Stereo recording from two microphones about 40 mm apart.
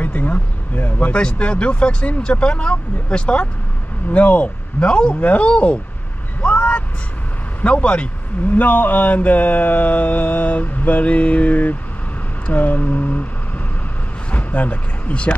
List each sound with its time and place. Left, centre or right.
0.0 s speech: left
1.1 s speech: left
4.1 s speech: left
5.2 s speech: left
6.4 s vehicle: left
7.6 s speech: left
8.5 s a sound: left
14.3 s speech: left